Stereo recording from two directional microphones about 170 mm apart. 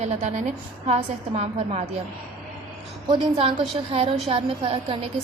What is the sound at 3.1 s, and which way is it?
A woman's voice, 30° right (ahead or behind).